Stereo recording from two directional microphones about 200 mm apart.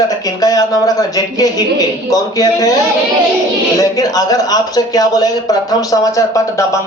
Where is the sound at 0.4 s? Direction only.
20° left (ahead or behind).